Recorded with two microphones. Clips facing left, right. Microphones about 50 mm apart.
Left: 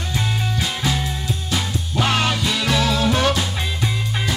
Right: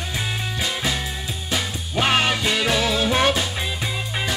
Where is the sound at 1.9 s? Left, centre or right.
Right.